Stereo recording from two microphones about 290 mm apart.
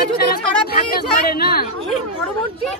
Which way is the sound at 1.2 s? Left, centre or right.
Left.